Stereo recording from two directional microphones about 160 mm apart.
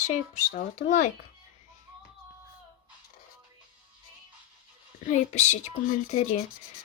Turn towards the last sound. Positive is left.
turn(degrees=45)  # may be behind; listen again after turning